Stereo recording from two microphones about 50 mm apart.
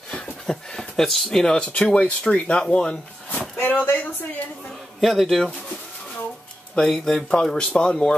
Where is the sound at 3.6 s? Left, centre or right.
Left.